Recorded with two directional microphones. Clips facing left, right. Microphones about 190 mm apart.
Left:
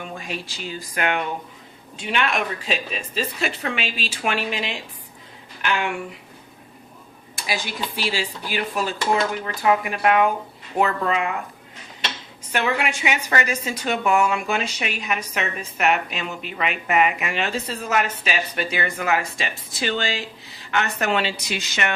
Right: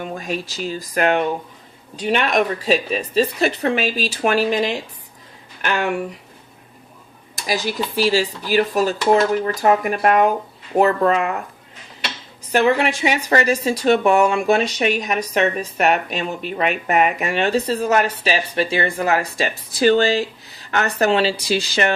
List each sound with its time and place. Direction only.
0.0 s speech: 40° right (ahead or behind)
7.3 s speech: 40° right (ahead or behind)
12.5 s speech: 35° right (ahead or behind)